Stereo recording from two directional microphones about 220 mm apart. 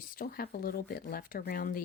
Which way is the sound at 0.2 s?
40° left (ahead or behind).